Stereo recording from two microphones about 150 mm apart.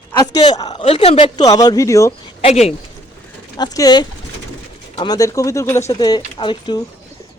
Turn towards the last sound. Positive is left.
turn(degrees=30)  # may be behind; listen again after turning